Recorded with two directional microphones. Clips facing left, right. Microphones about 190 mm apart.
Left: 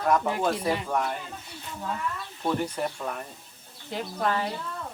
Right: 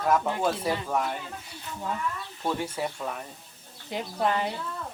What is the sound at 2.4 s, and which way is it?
Speech, 5° right (ahead or behind).